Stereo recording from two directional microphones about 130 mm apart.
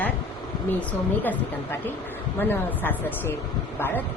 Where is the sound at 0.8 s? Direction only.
10° left (ahead or behind).